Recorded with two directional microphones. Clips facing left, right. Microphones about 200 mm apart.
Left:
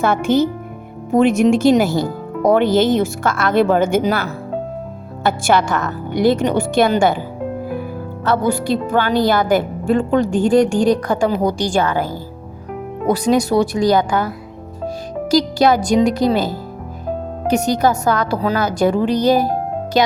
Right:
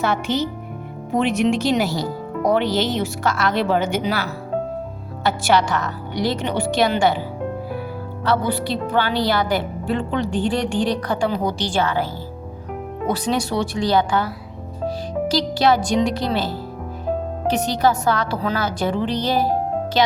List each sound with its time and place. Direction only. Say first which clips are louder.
0.0 s speech: left 6 dB; 50° left (ahead or behind)
8.2 s speech: left 3 dB; 45° left (ahead or behind)
13.1 s speech: left 7 dB; 40° left (ahead or behind)
15.3 s speech: left 5 dB; 45° left (ahead or behind)
17.6 s speech: left 1 dB; 45° left (ahead or behind)